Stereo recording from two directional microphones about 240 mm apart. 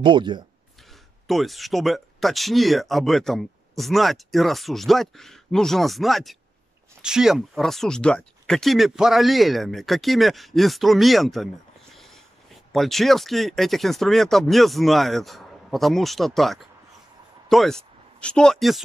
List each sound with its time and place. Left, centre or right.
0.0 s speech: centre
1.2 s speech: centre
12.7 s speech: centre